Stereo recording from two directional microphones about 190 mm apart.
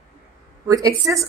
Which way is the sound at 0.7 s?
15° right (ahead or behind).